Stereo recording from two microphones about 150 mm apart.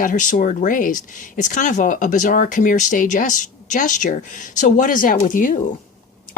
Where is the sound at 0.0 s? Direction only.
60° left (ahead or behind).